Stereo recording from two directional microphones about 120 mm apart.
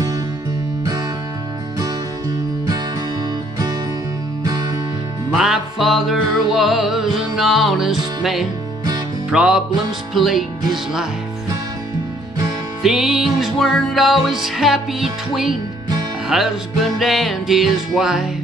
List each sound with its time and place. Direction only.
1.8 s music: 30° right (ahead or behind)
4.4 s music: 35° right (ahead or behind)
5.3 s music: 5° right (ahead or behind)
12.8 s music: centre (ahead or behind)